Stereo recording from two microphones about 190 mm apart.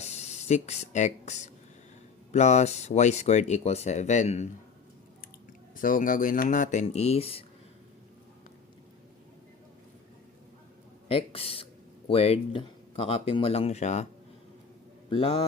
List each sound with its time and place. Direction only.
0.0 s speech: 35° left (ahead or behind)
5.7 s speech: 45° left (ahead or behind)
11.1 s speech: 30° left (ahead or behind)
15.1 s speech: 30° left (ahead or behind)